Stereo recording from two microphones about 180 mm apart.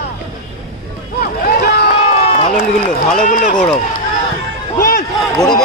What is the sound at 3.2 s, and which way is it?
Speech, 45° left (ahead or behind).